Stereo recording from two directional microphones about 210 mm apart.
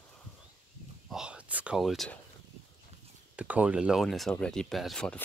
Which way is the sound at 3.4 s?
5° right (ahead or behind).